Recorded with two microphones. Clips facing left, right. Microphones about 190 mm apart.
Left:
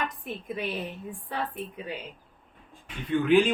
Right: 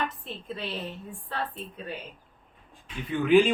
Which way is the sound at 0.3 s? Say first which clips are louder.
Left 3 dB; 15° left (ahead or behind).